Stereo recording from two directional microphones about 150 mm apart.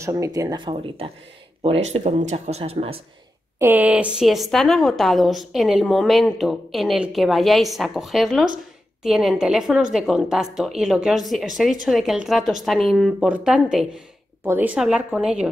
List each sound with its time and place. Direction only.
0.0 s speech: 20° right (ahead or behind); by 3.0 s 40° right (ahead or behind)
3.5 s a woman's voice: 15° right (ahead or behind)